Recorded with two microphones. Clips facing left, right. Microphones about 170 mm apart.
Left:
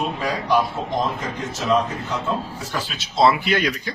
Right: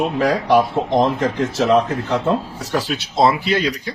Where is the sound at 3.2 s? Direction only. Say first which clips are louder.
Right 1 dB; 35° right (ahead or behind).